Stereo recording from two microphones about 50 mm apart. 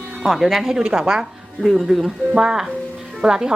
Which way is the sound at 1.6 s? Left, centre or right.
Centre.